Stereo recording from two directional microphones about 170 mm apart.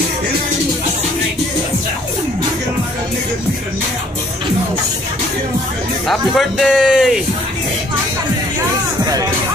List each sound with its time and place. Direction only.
6.0 s speech: centre (ahead or behind)
9.0 s music: 20° right (ahead or behind)